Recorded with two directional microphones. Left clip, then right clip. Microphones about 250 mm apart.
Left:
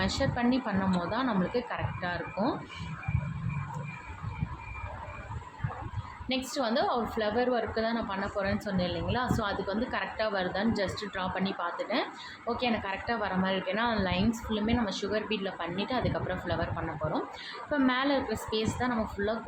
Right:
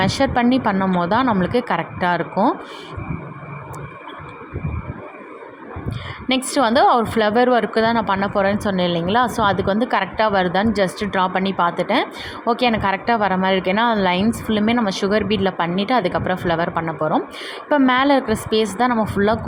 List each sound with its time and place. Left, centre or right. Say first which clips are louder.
0.0 s a woman's voice: right 12 dB; right
6.2 s a woman's voice: right 13 dB; right